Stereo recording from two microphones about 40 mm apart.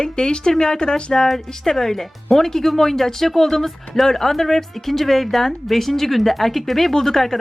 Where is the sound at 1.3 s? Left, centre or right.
Centre.